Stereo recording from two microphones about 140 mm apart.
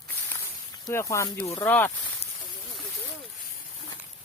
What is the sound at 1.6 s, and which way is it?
Speech, 10° left (ahead or behind).